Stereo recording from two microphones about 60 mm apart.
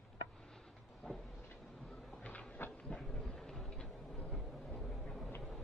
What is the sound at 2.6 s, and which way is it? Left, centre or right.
Train, left.